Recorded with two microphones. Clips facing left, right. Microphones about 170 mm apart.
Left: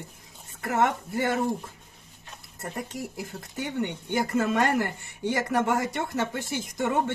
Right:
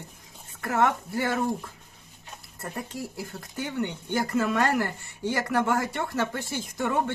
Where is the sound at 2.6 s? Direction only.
20° left (ahead or behind).